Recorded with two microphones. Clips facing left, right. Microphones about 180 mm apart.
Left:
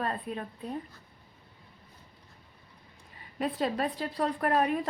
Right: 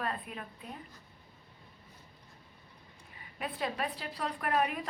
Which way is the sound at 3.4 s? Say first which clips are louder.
Left 6 dB; 35° left (ahead or behind).